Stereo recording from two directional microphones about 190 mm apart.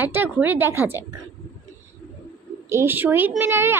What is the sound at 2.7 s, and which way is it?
A woman's voice, 10° right (ahead or behind).